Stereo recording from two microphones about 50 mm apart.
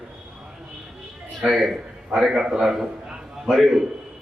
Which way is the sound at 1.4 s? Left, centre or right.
Centre.